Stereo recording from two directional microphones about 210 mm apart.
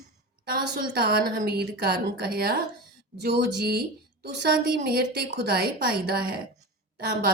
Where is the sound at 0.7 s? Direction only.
45° right (ahead or behind).